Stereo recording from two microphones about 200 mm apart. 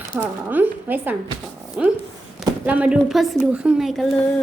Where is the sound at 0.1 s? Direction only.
10° right (ahead or behind).